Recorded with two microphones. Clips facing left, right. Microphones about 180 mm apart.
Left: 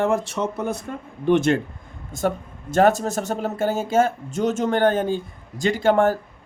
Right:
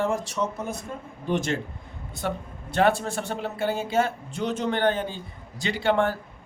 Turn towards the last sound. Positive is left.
turn(degrees=45)  # may be behind; listen again after turning